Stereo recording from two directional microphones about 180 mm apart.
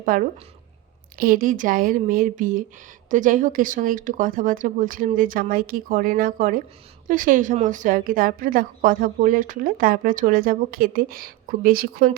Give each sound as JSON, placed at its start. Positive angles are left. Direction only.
{"t": 0.0, "sound": "a woman's voice", "side_deg": -50}